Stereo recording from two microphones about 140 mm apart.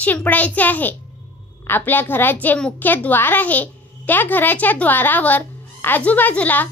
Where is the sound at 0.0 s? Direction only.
10° left (ahead or behind).